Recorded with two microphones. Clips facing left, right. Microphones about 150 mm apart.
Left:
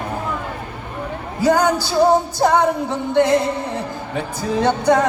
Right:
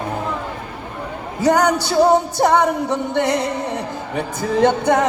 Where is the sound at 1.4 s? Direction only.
20° right (ahead or behind).